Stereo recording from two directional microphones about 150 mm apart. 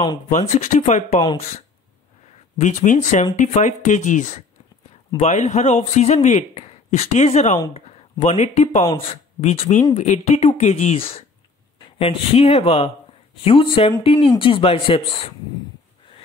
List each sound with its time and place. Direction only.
0.3 s a man's voice: 50° left (ahead or behind)
2.6 s a man's voice: 55° left (ahead or behind)
8.8 s a man's voice: 40° left (ahead or behind)